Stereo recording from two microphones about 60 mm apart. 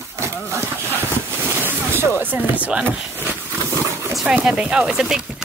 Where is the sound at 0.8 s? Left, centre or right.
Left.